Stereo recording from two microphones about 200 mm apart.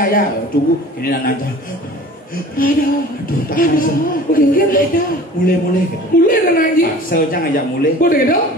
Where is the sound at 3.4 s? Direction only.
45° left (ahead or behind).